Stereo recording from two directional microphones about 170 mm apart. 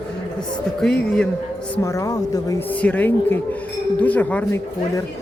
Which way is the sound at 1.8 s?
20° left (ahead or behind).